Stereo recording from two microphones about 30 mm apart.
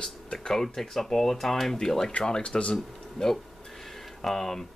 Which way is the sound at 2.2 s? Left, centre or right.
Left.